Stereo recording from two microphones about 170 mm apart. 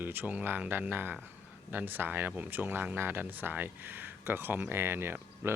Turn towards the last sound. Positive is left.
turn(degrees=-15)  # may be behind; listen again after turning